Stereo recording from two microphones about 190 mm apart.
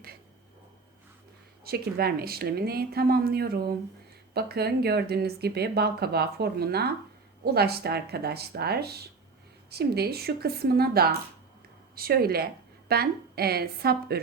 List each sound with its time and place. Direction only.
1.6 s speech: 55° right (ahead or behind)